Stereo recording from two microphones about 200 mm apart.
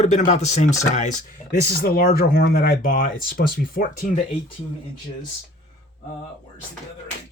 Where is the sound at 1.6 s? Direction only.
50° left (ahead or behind).